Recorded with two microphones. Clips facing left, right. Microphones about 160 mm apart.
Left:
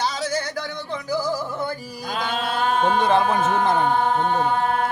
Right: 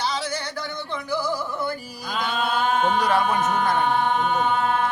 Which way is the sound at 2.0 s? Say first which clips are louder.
Even; 35° left (ahead or behind).